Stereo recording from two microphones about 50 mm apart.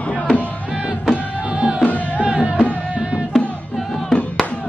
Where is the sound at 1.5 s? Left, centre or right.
Right.